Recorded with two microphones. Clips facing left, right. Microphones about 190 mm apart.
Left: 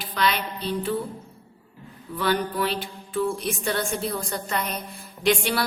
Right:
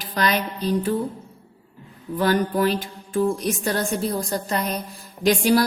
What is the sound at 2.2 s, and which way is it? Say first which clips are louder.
Music: right 4 dB; 45° right (ahead or behind).